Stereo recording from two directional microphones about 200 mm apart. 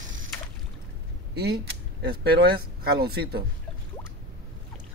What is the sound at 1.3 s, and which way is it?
Speech, 55° right (ahead or behind).